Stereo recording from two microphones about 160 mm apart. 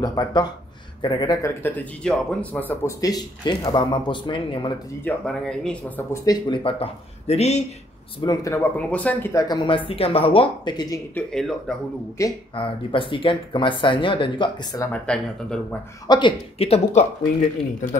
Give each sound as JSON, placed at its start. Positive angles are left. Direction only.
{"t": 0.0, "sound": "speech", "side_deg": 25}
{"t": 1.6, "sound": "speech", "side_deg": 10}
{"t": 2.8, "sound": "speech", "side_deg": 20}
{"t": 5.0, "sound": "speech", "side_deg": 5}
{"t": 6.2, "sound": "speech", "side_deg": 35}
{"t": 8.2, "sound": "speech", "side_deg": 25}
{"t": 8.7, "sound": "speech", "side_deg": 10}
{"t": 11.1, "sound": "speech", "side_deg": 5}
{"t": 12.2, "sound": "speech", "side_deg": 20}
{"t": 12.5, "sound": "speech", "side_deg": 30}
{"t": 14.9, "sound": "speech", "side_deg": 5}
{"t": 16.1, "sound": "speech", "side_deg": 30}